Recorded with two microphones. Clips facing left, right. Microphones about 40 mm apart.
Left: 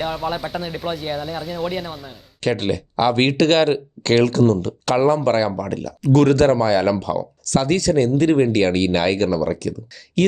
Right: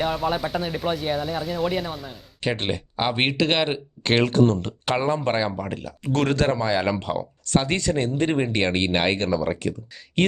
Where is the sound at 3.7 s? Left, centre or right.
Right.